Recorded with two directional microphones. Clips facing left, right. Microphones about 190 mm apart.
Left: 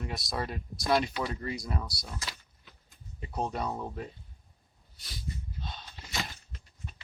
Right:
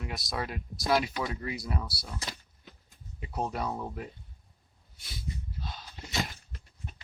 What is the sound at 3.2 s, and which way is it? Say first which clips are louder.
Speech: even; 5° right (ahead or behind).